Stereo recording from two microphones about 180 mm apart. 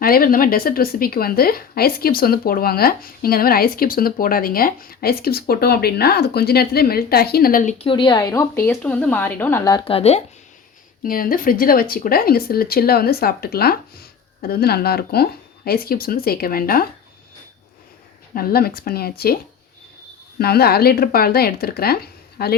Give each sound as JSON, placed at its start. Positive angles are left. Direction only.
{"t": 0.0, "sound": "speech", "side_deg": 55}
{"t": 11.0, "sound": "speech", "side_deg": 50}
{"t": 18.3, "sound": "speech", "side_deg": 55}
{"t": 20.4, "sound": "speech", "side_deg": 60}